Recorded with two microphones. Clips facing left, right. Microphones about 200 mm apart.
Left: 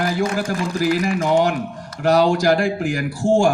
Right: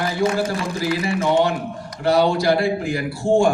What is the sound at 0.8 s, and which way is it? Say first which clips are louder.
Speech: left 1 dB; 45° left (ahead or behind).